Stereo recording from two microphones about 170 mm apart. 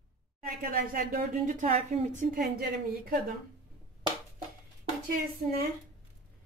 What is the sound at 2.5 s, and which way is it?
Speech, 65° right (ahead or behind).